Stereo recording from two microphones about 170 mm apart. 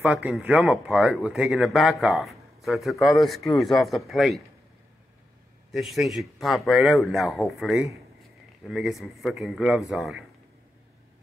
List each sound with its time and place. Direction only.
0.0 s speech: 10° right (ahead or behind)
5.7 s speech: centre (ahead or behind)